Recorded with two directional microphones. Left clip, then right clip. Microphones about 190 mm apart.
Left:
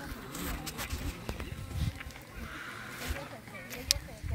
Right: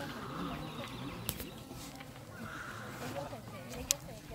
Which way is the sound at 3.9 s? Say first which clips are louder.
Left 6 dB; 20° right (ahead or behind).